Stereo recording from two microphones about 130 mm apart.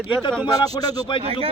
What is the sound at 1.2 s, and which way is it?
Speech, 50° right (ahead or behind).